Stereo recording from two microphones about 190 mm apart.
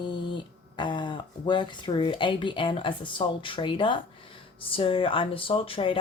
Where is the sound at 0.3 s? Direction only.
25° left (ahead or behind).